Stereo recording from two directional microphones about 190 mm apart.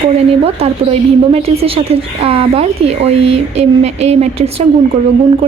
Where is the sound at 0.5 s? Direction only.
35° right (ahead or behind).